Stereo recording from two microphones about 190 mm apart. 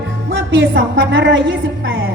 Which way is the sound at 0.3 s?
70° right (ahead or behind).